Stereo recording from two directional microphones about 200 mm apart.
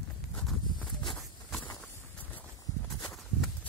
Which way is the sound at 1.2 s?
5° left (ahead or behind).